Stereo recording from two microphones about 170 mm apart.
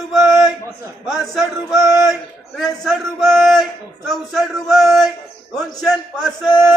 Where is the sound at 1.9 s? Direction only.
Centre (ahead or behind).